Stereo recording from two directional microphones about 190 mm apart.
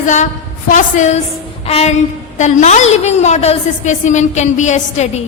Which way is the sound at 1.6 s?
35° left (ahead or behind).